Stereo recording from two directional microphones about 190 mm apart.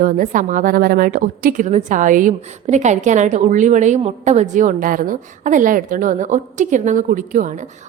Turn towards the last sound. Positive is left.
turn(degrees=-40)  # may be behind; listen again after turning